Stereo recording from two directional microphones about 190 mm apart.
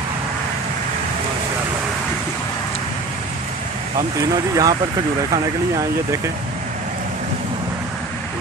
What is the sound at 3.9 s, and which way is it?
Speech, 20° right (ahead or behind).